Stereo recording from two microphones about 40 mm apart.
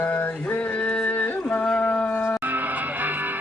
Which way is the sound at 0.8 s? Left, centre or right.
Left.